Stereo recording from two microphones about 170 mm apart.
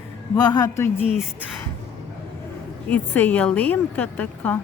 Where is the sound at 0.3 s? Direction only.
20° left (ahead or behind).